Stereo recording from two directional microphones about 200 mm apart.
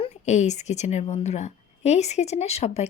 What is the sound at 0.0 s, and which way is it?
A woman's voice, 35° left (ahead or behind).